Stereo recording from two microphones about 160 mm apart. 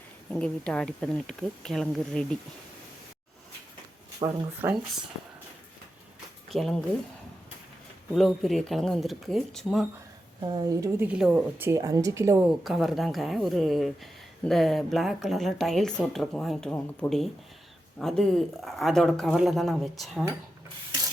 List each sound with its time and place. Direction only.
0.3 s a woman's voice: 5° left (ahead or behind)
4.2 s speech: 30° right (ahead or behind)
4.6 s a woman's voice: 15° right (ahead or behind)
6.5 s a woman's voice: centre (ahead or behind)
8.1 s a woman's voice: centre (ahead or behind)
10.4 s a woman's voice: 25° right (ahead or behind)
12.5 s a woman's voice: centre (ahead or behind)